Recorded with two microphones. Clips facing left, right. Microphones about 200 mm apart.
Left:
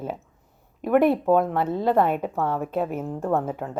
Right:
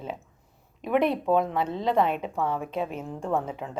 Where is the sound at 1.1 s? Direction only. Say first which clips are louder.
Left 4 dB; 55° left (ahead or behind).